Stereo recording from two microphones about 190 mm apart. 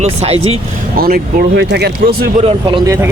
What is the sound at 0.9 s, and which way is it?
Speech, 50° right (ahead or behind).